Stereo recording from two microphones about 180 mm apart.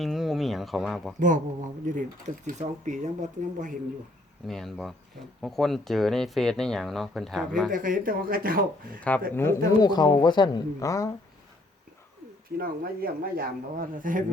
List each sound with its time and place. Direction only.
0.0 s a sound: centre (ahead or behind)
2.0 s speech: 45° right (ahead or behind)
4.4 s speech: centre (ahead or behind)
7.7 s speech: 50° right (ahead or behind)
9.0 s speech: 10° left (ahead or behind)
12.5 s speech: 55° right (ahead or behind)